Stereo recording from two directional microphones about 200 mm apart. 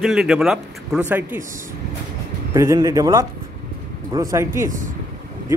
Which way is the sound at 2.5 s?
15° right (ahead or behind).